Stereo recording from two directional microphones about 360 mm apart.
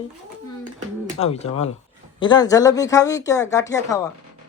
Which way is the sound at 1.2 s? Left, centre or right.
Centre.